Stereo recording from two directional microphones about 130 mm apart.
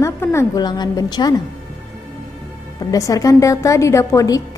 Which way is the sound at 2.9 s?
25° left (ahead or behind).